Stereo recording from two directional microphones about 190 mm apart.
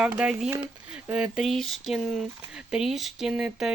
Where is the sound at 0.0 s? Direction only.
5° right (ahead or behind).